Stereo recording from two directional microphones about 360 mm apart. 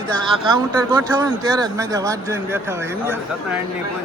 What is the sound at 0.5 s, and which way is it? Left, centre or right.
Speech, centre.